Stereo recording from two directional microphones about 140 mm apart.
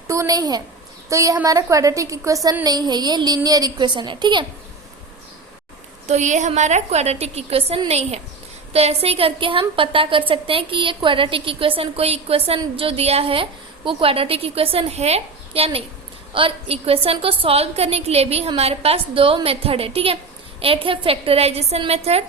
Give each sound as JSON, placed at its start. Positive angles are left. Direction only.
{"t": 0.1, "sound": "a woman's voice", "side_deg": -25}
{"t": 6.1, "sound": "a woman's voice", "side_deg": -60}